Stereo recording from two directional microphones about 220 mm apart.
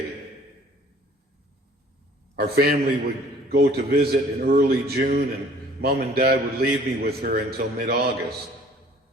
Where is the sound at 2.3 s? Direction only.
45° right (ahead or behind).